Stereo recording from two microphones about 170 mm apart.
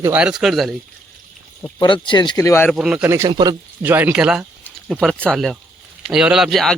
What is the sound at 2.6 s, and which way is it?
Speech, 5° right (ahead or behind).